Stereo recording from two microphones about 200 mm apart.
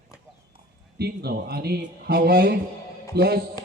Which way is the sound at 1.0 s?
55° right (ahead or behind).